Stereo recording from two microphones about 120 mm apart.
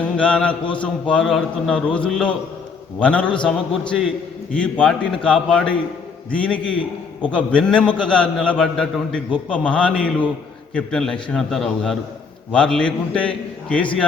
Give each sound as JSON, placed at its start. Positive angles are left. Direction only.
{"t": 0.0, "sound": "a man's voice", "side_deg": 10}